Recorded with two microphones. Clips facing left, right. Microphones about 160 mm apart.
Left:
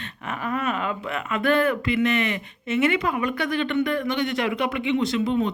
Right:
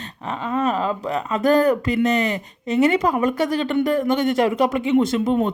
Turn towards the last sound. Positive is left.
turn(degrees=-45)  # may be behind; listen again after turning